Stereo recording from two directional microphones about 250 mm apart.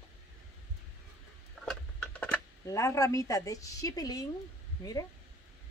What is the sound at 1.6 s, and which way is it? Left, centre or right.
Speech, centre.